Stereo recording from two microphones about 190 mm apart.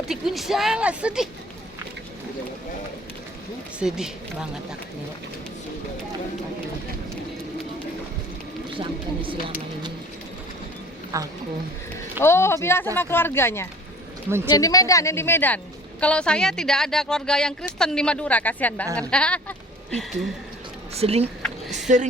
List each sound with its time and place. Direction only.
0.1 s a woman's voice: centre (ahead or behind)
3.8 s a woman's voice: 5° right (ahead or behind)
8.8 s speech: 25° right (ahead or behind)
11.1 s speech: 15° right (ahead or behind)
12.2 s speech: 15° left (ahead or behind)
14.3 s speech: 10° right (ahead or behind)
14.5 s a woman's voice: 20° left (ahead or behind)
20.9 s speech: 30° right (ahead or behind)